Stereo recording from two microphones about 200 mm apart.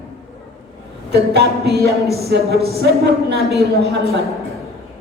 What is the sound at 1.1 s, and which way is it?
Speech, 55° right (ahead or behind).